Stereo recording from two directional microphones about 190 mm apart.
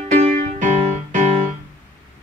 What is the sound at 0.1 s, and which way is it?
Music, 35° right (ahead or behind).